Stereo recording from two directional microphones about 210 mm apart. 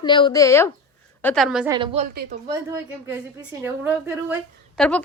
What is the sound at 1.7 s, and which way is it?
Speech, 25° right (ahead or behind).